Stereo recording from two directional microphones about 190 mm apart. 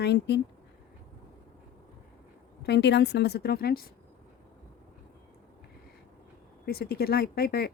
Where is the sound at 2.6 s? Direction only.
60° left (ahead or behind).